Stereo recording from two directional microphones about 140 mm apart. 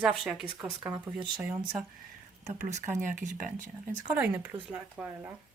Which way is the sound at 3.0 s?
65° right (ahead or behind).